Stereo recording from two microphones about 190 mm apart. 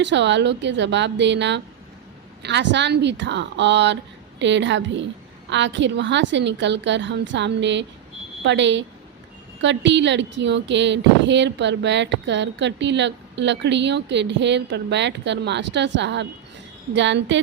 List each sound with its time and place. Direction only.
0.0 s speech: 70° right (ahead or behind)